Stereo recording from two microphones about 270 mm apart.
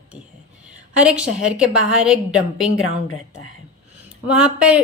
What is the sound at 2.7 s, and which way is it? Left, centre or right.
Speech, left.